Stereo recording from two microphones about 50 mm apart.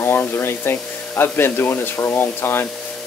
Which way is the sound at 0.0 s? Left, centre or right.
Left.